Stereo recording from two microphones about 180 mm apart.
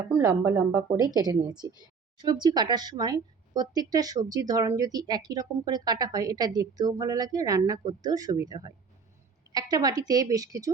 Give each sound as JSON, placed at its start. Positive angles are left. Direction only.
{"t": 0.1, "sound": "speech", "side_deg": -15}